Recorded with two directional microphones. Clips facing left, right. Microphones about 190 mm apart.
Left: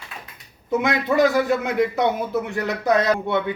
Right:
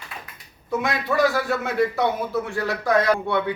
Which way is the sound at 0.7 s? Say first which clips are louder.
Left 3 dB; 20° left (ahead or behind).